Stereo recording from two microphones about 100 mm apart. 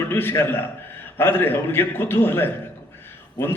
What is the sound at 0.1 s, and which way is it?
A man's voice, 20° left (ahead or behind).